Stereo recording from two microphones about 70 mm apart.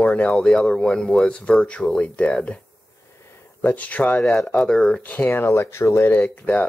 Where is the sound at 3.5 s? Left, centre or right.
Left.